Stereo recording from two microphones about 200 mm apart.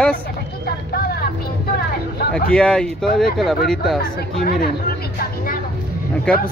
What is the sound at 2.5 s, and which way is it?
Speech, 5° left (ahead or behind).